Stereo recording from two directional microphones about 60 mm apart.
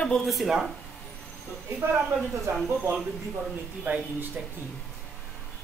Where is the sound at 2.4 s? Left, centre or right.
Right.